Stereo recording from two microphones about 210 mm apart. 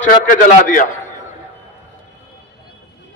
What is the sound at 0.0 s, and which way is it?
Speech, 40° left (ahead or behind).